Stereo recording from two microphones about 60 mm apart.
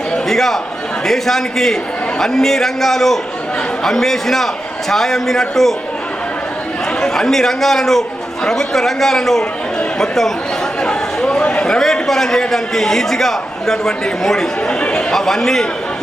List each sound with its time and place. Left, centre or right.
0.1 s a sound: centre
1.0 s a man's voice: centre
7.0 s a man's voice: centre
14.7 s speech: centre
15.1 s a man's voice: centre